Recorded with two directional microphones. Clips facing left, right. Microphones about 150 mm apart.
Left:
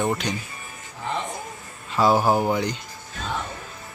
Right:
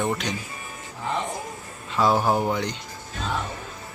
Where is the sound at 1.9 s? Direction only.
5° left (ahead or behind).